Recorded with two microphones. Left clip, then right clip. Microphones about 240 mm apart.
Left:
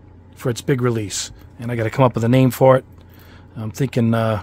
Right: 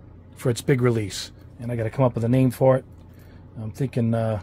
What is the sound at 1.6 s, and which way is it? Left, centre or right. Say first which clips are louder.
Speech: left 6 dB; left.